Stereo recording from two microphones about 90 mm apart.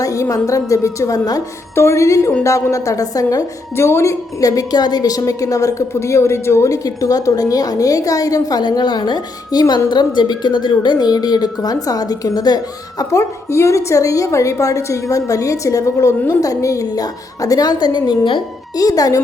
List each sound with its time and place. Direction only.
0.0 s a woman's voice: 40° left (ahead or behind)
1.7 s a woman's voice: 30° left (ahead or behind)
3.8 s a woman's voice: 30° left (ahead or behind); by 12.5 s 50° left (ahead or behind)
13.0 s a woman's voice: 35° left (ahead or behind); by 18.4 s 55° left (ahead or behind)
18.8 s speech: 45° left (ahead or behind)